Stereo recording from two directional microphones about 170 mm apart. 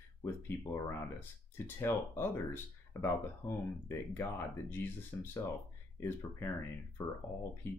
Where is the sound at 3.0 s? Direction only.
15° left (ahead or behind).